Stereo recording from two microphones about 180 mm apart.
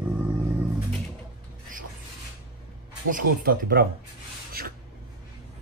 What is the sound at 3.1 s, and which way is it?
Speech, 55° right (ahead or behind).